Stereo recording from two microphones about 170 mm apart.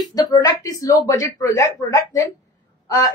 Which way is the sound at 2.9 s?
20° left (ahead or behind).